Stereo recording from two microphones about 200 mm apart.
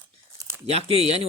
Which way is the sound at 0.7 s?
30° right (ahead or behind).